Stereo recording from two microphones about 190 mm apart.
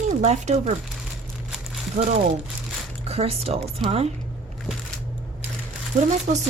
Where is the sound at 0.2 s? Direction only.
35° right (ahead or behind).